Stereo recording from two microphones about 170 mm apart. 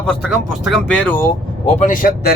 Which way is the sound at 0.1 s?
Centre (ahead or behind).